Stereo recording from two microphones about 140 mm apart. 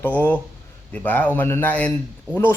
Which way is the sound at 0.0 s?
10° left (ahead or behind).